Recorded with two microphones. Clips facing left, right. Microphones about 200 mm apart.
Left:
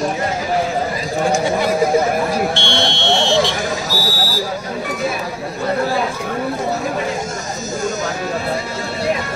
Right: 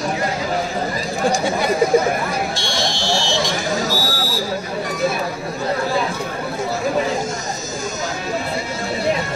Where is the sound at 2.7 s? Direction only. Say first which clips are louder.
Left 3 dB; 30° left (ahead or behind).